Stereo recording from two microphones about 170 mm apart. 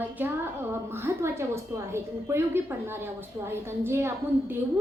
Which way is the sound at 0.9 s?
15° right (ahead or behind).